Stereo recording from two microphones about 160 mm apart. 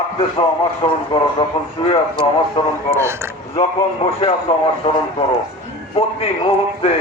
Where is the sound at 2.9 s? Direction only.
15° right (ahead or behind).